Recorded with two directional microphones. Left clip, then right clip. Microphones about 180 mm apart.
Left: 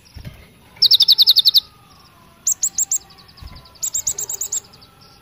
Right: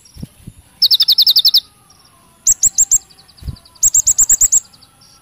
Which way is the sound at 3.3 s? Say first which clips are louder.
Right 10 dB; 20° right (ahead or behind).